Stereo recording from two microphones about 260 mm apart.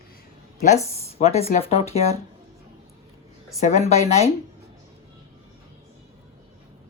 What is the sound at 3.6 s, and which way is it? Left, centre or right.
Speech, left.